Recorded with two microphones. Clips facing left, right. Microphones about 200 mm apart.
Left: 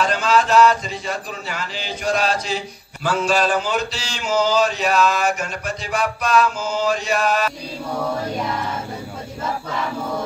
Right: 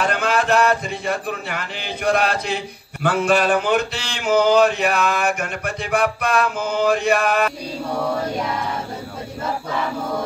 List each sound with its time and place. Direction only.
0.0 s speech: 60° right (ahead or behind)